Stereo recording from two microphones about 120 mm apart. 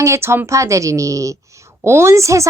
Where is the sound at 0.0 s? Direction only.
25° right (ahead or behind).